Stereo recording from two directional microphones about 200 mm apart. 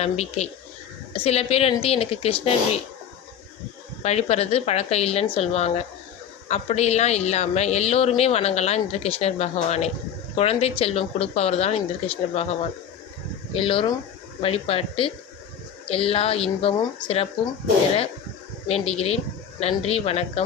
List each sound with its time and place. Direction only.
0.0 s a woman's voice: 30° left (ahead or behind)
4.0 s a woman's voice: 30° left (ahead or behind)
13.5 s speech: 25° left (ahead or behind)
18.7 s a woman's voice: 30° left (ahead or behind)